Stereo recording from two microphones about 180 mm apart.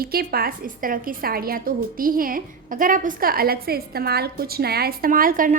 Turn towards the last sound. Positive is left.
turn(degrees=-50)  # may be behind; listen again after turning